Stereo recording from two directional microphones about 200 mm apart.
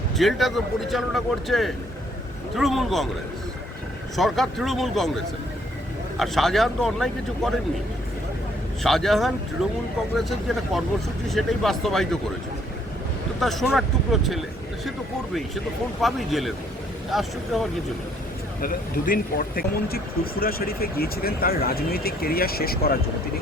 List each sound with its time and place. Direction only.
0.2 s speech: centre (ahead or behind)
4.2 s speech: centre (ahead or behind)
8.8 s speech: centre (ahead or behind)
13.4 s speech: centre (ahead or behind)
16.0 s speech: centre (ahead or behind)
18.6 s speech: 45° left (ahead or behind)